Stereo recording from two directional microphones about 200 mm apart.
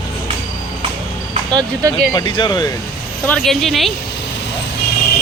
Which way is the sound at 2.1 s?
25° left (ahead or behind).